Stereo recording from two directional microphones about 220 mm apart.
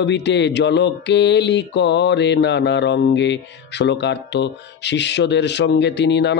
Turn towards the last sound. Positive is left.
turn(degrees=50)  # may be behind; listen again after turning